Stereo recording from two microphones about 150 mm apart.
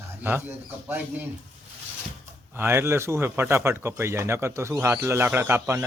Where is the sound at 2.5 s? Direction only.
15° right (ahead or behind).